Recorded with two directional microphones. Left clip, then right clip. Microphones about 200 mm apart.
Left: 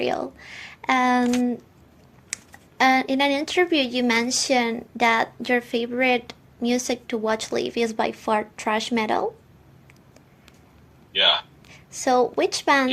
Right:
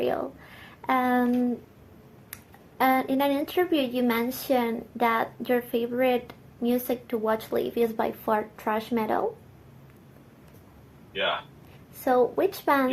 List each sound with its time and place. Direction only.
0.0 s speech: 50° left (ahead or behind)
2.7 s speech: 50° left (ahead or behind)
11.1 s speech: 20° left (ahead or behind)
12.0 s speech: 50° left (ahead or behind)